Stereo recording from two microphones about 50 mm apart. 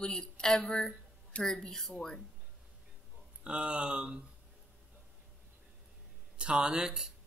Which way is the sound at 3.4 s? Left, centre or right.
Centre.